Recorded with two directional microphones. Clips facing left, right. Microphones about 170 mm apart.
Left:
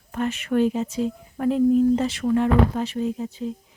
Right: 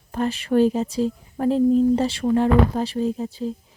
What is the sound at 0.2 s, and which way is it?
Speech, 35° right (ahead or behind).